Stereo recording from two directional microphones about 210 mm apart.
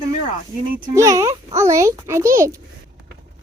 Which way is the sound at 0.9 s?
15° right (ahead or behind).